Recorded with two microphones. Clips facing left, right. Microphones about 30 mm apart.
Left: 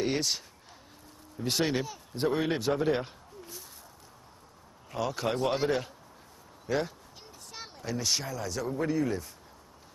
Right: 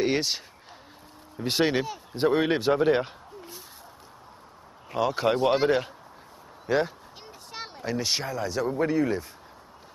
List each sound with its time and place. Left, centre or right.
0.0 s speech: right
1.4 s speech: right
4.9 s speech: right